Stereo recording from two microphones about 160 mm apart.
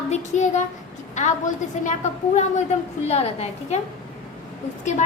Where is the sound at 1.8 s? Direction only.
50° left (ahead or behind).